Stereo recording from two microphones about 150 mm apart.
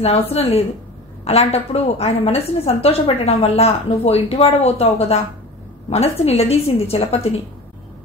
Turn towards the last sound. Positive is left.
turn(degrees=40)  # may be behind; listen again after turning